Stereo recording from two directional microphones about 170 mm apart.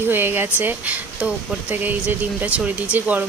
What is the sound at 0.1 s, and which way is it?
Speech, 10° right (ahead or behind).